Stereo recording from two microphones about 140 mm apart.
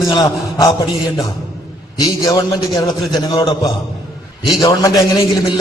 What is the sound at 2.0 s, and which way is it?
A man's voice, 25° left (ahead or behind).